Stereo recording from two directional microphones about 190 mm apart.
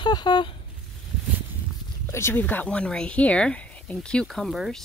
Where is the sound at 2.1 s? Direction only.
15° left (ahead or behind).